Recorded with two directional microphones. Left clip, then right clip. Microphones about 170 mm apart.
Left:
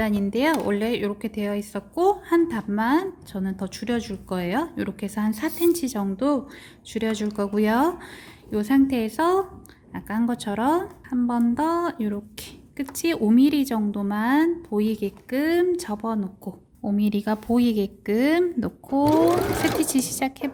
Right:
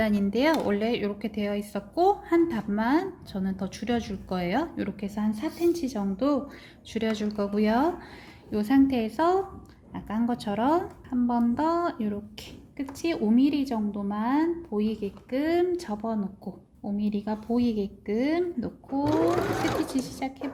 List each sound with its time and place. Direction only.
0.0 s a woman's voice: 15° left (ahead or behind); by 20.5 s 40° left (ahead or behind)